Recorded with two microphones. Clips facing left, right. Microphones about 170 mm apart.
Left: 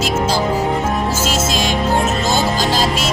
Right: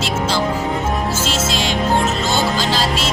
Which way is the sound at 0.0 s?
40° left (ahead or behind).